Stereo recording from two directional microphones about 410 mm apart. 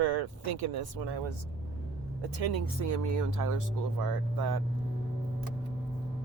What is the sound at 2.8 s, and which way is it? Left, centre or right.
Speech, right.